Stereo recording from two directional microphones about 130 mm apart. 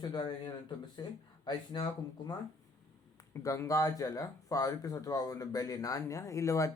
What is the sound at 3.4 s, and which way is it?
Speech, 25° left (ahead or behind).